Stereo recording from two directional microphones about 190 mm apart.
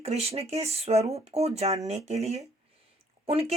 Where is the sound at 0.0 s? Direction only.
35° right (ahead or behind).